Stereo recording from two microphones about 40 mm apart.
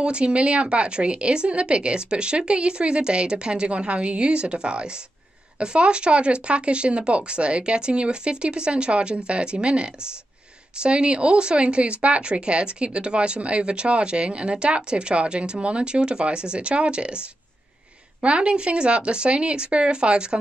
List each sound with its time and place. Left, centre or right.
0.0 s speech: right
18.2 s speech: right